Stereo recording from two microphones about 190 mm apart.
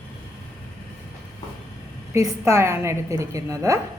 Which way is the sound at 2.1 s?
15° right (ahead or behind).